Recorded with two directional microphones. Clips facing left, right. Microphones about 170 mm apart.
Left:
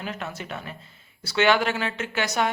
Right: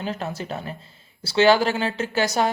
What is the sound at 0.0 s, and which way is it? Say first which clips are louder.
Speech: right 5 dB; 30° right (ahead or behind).